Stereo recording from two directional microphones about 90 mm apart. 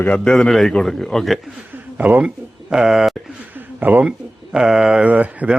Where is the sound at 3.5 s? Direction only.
20° right (ahead or behind).